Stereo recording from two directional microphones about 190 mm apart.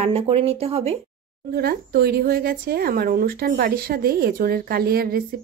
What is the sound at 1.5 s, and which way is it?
A woman's voice, 55° right (ahead or behind).